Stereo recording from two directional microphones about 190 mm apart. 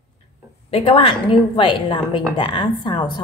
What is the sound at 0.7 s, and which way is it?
A woman's voice, 30° left (ahead or behind).